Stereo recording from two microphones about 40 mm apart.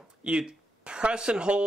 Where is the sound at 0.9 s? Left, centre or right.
Right.